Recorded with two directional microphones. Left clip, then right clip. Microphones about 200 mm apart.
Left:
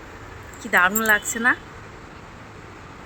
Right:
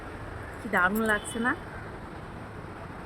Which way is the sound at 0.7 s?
Centre (ahead or behind).